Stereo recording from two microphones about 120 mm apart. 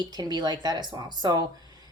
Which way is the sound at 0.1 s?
35° right (ahead or behind).